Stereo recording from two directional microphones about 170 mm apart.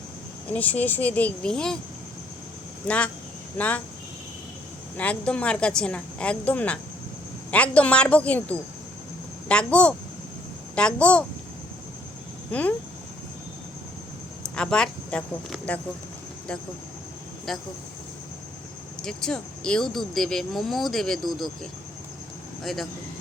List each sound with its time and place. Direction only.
0.5 s a woman's voice: 10° left (ahead or behind)
2.8 s a woman's voice: 5° left (ahead or behind)
4.9 s a woman's voice: 10° left (ahead or behind)
12.5 s speech: 10° left (ahead or behind)
14.5 s speech: 5° left (ahead or behind)
17.5 s speech: centre (ahead or behind)
19.0 s speech: 5° left (ahead or behind)